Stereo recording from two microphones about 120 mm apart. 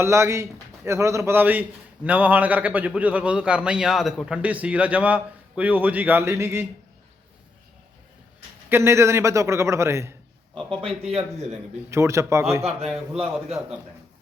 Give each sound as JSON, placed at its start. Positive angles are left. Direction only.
{"t": 0.0, "sound": "a man's voice", "side_deg": -25}
{"t": 8.7, "sound": "a man's voice", "side_deg": -20}
{"t": 11.0, "sound": "a man's voice", "side_deg": -60}
{"t": 11.9, "sound": "a man's voice", "side_deg": -25}